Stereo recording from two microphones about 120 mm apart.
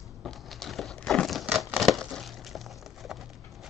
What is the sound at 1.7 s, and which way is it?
Crumpling, centre (ahead or behind).